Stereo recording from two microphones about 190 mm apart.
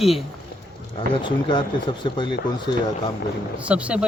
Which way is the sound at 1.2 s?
25° left (ahead or behind).